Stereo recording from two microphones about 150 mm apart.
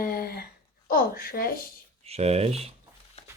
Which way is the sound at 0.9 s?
80° left.